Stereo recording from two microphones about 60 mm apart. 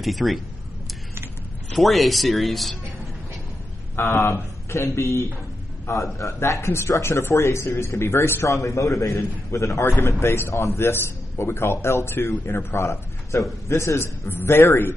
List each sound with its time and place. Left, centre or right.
0.0 s speech: centre
1.8 s speech: centre
3.9 s a man's voice: left
8.5 s a man's voice: left
10.2 s a man's voice: left